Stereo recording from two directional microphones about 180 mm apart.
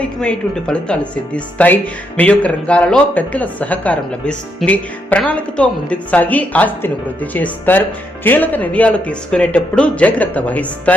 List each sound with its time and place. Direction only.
0.0 s speech: 5° left (ahead or behind)